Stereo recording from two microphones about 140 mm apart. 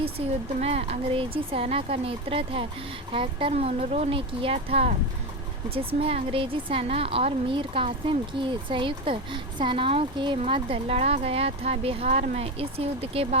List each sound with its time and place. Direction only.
0.2 s speech: 45° right (ahead or behind)
6.3 s a woman's voice: 40° right (ahead or behind)